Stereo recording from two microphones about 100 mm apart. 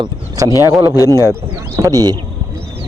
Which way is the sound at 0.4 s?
35° right (ahead or behind).